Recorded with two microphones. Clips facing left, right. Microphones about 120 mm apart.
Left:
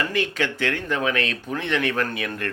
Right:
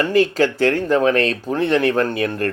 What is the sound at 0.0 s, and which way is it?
Speech, 35° right (ahead or behind).